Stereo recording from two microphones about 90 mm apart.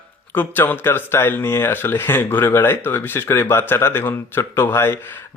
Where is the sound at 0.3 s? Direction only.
20° left (ahead or behind).